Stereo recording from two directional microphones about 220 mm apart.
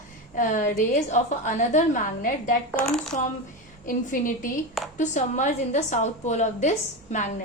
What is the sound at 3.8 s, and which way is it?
A woman's voice, 40° left (ahead or behind).